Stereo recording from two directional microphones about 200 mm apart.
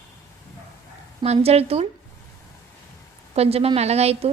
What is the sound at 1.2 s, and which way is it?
Speech, 30° right (ahead or behind).